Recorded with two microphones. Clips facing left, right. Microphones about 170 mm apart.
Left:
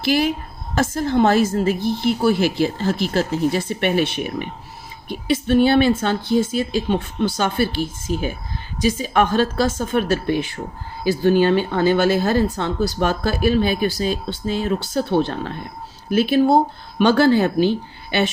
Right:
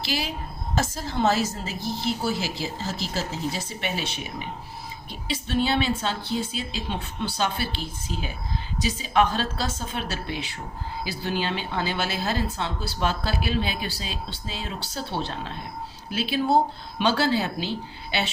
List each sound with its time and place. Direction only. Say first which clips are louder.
0.0 s a woman's voice: left 11 dB; 50° left (ahead or behind)